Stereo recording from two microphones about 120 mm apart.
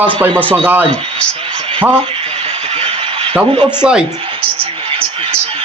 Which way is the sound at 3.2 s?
45° right (ahead or behind).